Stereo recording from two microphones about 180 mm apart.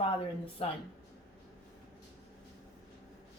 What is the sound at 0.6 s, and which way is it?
Speech, 35° left (ahead or behind).